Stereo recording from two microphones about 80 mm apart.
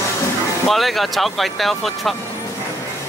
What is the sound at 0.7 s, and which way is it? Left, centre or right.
Speech, centre.